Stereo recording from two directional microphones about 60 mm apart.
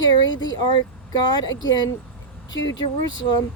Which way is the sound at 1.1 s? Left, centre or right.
Left.